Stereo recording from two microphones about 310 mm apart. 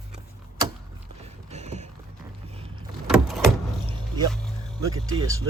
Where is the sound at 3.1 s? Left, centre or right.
Centre.